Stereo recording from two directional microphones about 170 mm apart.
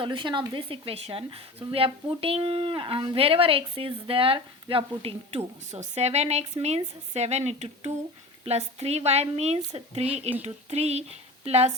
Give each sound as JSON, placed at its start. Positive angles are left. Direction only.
{"t": 0.0, "sound": "speech", "side_deg": -30}